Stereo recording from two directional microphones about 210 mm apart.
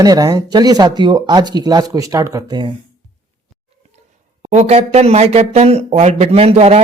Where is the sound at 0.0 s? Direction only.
20° right (ahead or behind).